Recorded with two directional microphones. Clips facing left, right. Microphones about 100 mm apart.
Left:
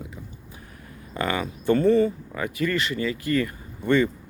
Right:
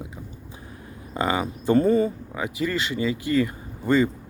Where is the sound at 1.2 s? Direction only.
20° right (ahead or behind).